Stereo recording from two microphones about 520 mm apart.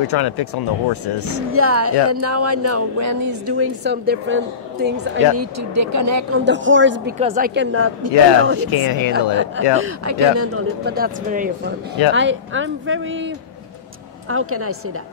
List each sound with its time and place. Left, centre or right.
0.0 s speech: left
1.5 s speech: right
5.4 s speech: right
6.4 s speech: right
8.5 s speech: left
9.1 s speech: right
14.3 s speech: right